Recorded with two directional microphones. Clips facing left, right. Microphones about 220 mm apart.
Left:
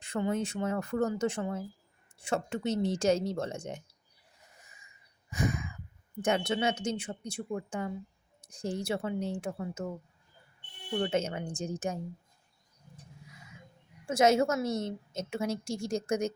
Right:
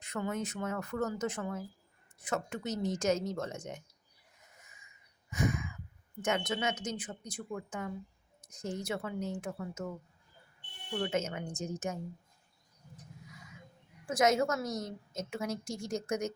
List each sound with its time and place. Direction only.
0.0 s a woman's voice: 30° left (ahead or behind)
4.4 s snort: 30° left (ahead or behind)
5.3 s a sound: 35° left (ahead or behind)
6.2 s a woman's voice: 30° left (ahead or behind)
10.9 s speech: 30° left (ahead or behind)
14.1 s a woman's voice: 25° left (ahead or behind)